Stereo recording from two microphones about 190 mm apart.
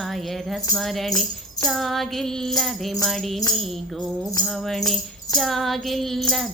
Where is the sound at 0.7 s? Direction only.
Centre (ahead or behind).